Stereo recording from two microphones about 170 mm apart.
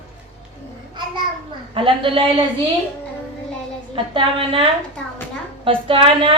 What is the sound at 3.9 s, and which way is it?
Speech, 30° right (ahead or behind).